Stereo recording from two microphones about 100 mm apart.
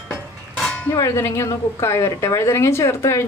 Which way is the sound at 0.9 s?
30° left (ahead or behind).